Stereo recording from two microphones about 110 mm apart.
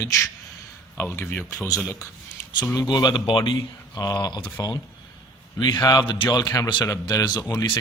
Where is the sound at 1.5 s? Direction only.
30° left (ahead or behind).